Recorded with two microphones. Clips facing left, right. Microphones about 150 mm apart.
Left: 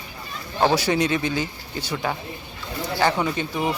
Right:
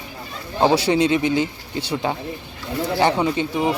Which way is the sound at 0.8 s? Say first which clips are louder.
Right 4 dB; 25° right (ahead or behind).